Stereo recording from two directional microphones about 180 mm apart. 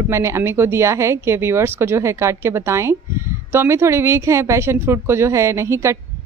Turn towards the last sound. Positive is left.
turn(degrees=-15)  # may be behind; listen again after turning